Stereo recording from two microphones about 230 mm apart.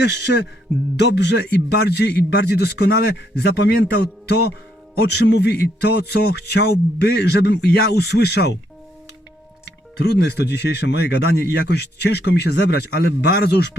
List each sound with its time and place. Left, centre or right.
0.0 s speech: left
9.6 s speech: left